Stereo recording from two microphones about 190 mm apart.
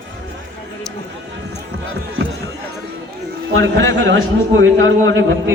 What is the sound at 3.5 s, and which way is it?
A man's voice, 70° right (ahead or behind).